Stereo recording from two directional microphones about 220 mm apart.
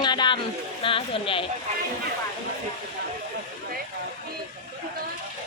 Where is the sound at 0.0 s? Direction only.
20° left (ahead or behind).